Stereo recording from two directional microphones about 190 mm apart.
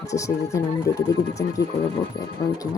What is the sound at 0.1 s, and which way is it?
Speech, 15° left (ahead or behind).